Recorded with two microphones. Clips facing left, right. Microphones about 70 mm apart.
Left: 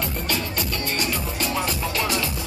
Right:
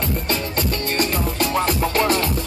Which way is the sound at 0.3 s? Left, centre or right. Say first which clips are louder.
Right 4 dB; right.